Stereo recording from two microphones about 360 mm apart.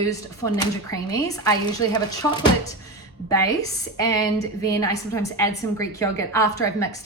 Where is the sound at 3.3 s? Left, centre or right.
Centre.